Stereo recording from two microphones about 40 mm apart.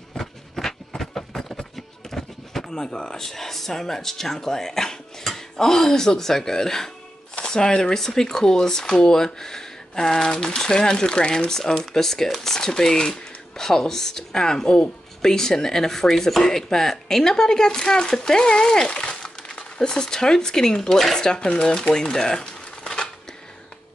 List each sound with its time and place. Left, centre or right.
0.2 s music: centre
5.2 s speech: centre
21.5 s speech: left
21.9 s a sound: centre